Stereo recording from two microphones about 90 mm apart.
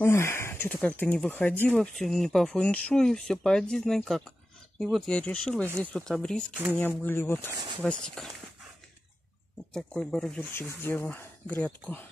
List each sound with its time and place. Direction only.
0.0 s speech: 30° left (ahead or behind)
1.8 s speech: 5° left (ahead or behind)
5.1 s speech: 15° left (ahead or behind)
6.7 s speech: 20° left (ahead or behind)
7.5 s speech: 60° right (ahead or behind)
7.8 s speech: 5° left (ahead or behind)
9.8 s speech: 10° left (ahead or behind)
10.5 s speech: 25° left (ahead or behind)